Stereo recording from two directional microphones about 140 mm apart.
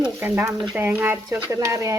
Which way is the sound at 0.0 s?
15° right (ahead or behind).